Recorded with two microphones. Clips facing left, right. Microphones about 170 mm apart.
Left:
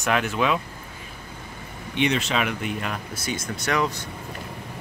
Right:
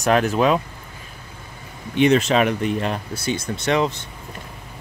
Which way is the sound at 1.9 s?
40° right (ahead or behind).